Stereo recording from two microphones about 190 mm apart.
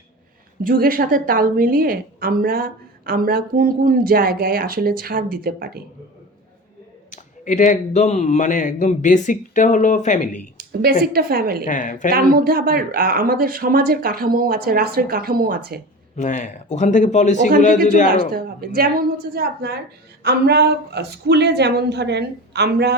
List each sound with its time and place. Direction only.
0.6 s a woman's voice: 50° right (ahead or behind)
7.1 s speech: 40° left (ahead or behind)
10.6 s a sound: 55° right (ahead or behind)
11.0 s a woman's voice: 50° right (ahead or behind)
11.6 s speech: 45° left (ahead or behind)
12.1 s a woman's voice: 50° right (ahead or behind)
16.1 s speech: 40° left (ahead or behind)
18.3 s a woman's voice: 50° right (ahead or behind)